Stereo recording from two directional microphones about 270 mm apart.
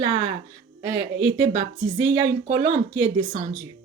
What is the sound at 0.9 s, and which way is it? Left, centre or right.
Speech, right.